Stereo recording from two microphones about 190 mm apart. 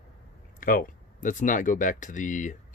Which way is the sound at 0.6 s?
45° left (ahead or behind).